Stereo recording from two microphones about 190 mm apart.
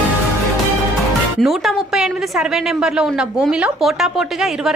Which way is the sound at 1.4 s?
Centre (ahead or behind).